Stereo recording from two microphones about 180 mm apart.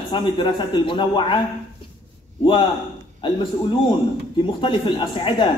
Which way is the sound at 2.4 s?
30° left (ahead or behind).